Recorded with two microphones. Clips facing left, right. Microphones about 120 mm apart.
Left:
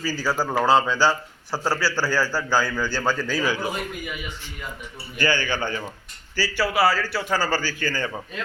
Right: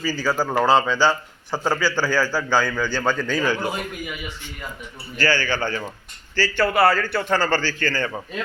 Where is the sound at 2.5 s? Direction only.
10° left (ahead or behind).